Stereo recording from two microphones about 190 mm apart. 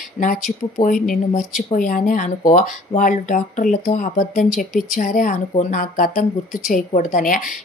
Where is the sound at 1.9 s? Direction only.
45° left (ahead or behind).